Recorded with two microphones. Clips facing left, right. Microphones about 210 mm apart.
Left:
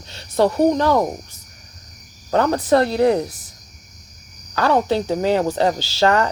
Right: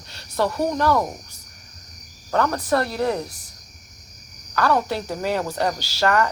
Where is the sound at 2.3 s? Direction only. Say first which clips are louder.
Left 5 dB; 25° left (ahead or behind).